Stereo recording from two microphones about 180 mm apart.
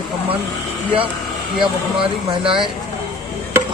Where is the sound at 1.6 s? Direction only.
30° right (ahead or behind).